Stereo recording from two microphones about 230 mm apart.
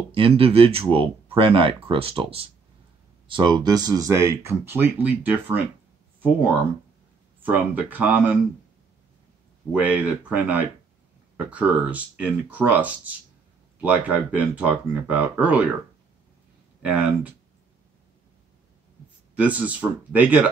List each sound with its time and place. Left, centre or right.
0.1 s speech: right; by 5.6 s centre
7.4 s speech: centre
9.7 s speech: centre
16.8 s speech: centre
19.3 s speech: centre